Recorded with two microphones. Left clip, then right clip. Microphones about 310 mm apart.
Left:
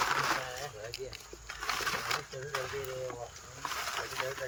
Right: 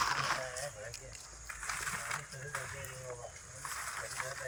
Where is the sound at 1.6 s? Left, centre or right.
Left.